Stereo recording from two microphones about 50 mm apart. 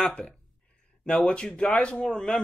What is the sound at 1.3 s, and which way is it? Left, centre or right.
Speech, left.